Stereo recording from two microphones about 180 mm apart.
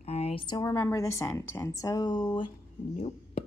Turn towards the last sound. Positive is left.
turn(degrees=35)  # may be behind; listen again after turning